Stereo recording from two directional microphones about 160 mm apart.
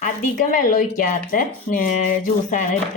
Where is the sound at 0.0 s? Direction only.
55° left (ahead or behind).